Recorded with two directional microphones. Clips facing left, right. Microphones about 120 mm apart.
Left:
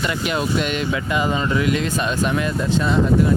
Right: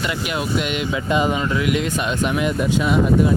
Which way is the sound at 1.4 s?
Centre (ahead or behind).